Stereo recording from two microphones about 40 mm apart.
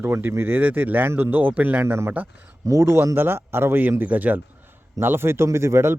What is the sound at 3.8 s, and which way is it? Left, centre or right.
Speech, right.